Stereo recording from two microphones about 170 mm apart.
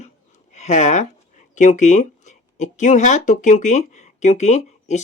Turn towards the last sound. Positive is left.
turn(degrees=45)  # may be behind; listen again after turning